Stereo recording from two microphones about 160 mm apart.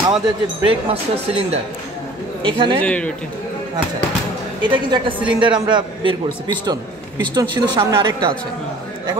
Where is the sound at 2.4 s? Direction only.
30° right (ahead or behind).